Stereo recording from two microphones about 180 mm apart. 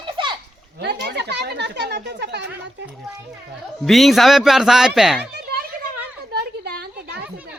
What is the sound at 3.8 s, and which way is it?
Speech, centre (ahead or behind).